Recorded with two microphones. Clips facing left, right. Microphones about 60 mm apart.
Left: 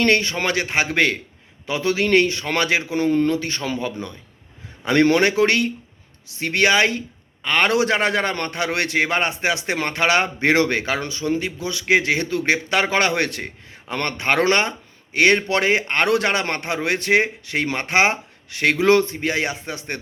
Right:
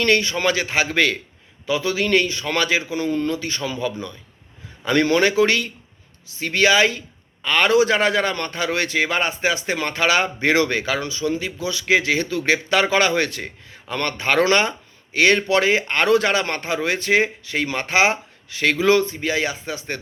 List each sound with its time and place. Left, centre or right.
0.0 s a man's voice: left
4.9 s a man's voice: left
13.4 s a man's voice: left